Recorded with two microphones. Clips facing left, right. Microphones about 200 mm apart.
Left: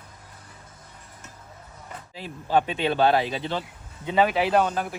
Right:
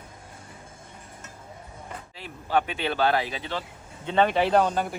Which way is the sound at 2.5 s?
25° left (ahead or behind).